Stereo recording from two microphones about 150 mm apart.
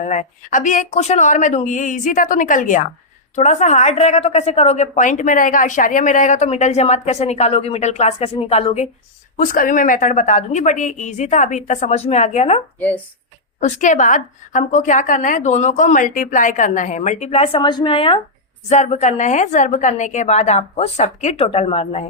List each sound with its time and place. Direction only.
0.0 s a woman's voice: 55° left (ahead or behind)
9.4 s a woman's voice: 65° left (ahead or behind)
13.6 s a woman's voice: 55° left (ahead or behind); by 18.2 s 35° left (ahead or behind)
18.7 s a woman's voice: 50° left (ahead or behind)